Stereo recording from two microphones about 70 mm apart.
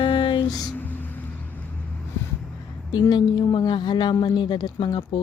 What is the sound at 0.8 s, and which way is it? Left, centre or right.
Vehicle, left.